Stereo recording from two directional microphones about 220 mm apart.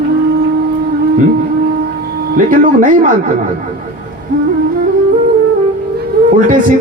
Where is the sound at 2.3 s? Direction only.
35° right (ahead or behind).